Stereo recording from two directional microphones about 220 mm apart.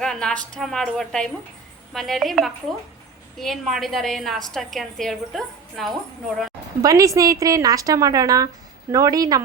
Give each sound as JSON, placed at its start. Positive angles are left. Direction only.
{"t": 0.0, "sound": "a woman's voice", "side_deg": 5}
{"t": 6.8, "sound": "a woman's voice", "side_deg": -15}